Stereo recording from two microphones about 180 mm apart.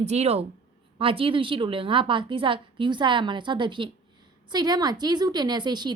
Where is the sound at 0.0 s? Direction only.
40° right (ahead or behind).